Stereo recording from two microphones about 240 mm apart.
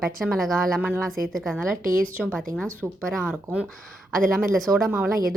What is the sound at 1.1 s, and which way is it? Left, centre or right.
Speech, right.